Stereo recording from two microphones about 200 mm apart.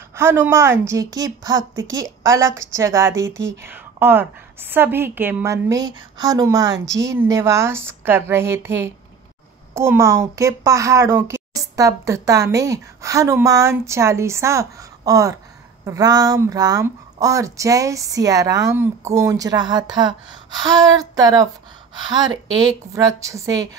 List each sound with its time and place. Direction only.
0.1 s a woman's voice: 10° right (ahead or behind)
22.7 s a woman's voice: 15° right (ahead or behind)